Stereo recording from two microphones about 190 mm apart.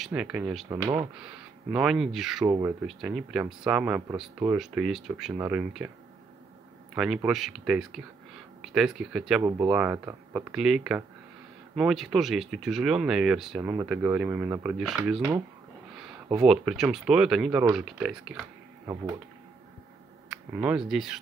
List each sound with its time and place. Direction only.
0.0 s speech: 5° right (ahead or behind)
0.7 s speech: 20° right (ahead or behind)
1.2 s speech: 5° right (ahead or behind)
7.2 s speech: centre (ahead or behind)
9.4 s speech: 20° right (ahead or behind)
20.2 s a sound: 5° right (ahead or behind)
20.9 s speech: 5° right (ahead or behind)